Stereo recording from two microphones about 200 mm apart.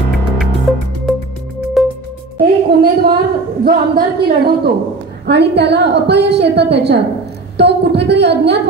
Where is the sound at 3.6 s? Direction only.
50° right (ahead or behind).